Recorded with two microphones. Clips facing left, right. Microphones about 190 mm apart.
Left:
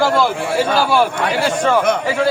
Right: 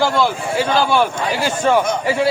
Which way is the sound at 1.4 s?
5° right (ahead or behind).